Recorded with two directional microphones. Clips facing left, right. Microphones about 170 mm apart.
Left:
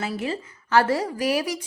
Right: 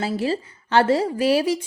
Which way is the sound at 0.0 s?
30° right (ahead or behind).